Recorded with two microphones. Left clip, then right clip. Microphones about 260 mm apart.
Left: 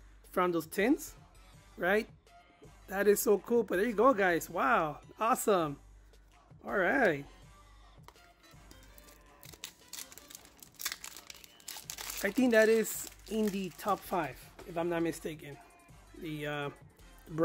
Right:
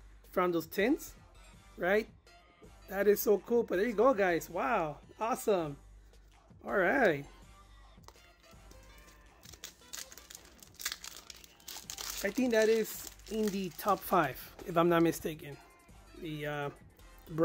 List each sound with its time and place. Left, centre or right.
0.3 s speech: centre
6.6 s speech: centre
10.8 s crumpling: centre
14.1 s speech: right; by 16.7 s centre